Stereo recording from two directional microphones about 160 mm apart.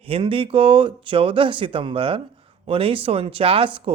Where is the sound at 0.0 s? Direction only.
35° right (ahead or behind).